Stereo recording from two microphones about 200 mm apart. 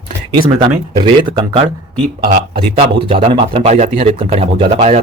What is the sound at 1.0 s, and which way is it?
Speech, 25° right (ahead or behind).